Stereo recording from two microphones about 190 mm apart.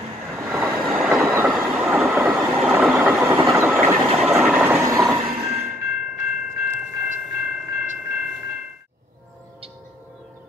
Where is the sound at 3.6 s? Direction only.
Centre (ahead or behind).